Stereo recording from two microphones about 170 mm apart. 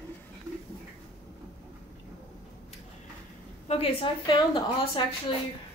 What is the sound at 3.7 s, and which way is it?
A woman's voice, 35° left (ahead or behind).